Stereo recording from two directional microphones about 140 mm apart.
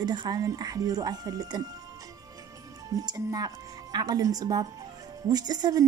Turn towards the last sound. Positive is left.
turn(degrees=-25)  # may be behind; listen again after turning